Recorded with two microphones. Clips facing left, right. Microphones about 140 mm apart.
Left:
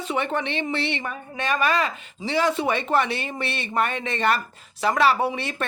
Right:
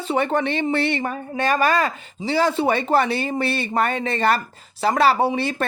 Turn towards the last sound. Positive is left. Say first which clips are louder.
# right 5 dB
turn(degrees=-35)  # may be behind; listen again after turning